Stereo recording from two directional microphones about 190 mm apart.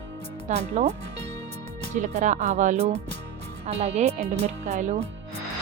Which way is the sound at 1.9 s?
40° right (ahead or behind).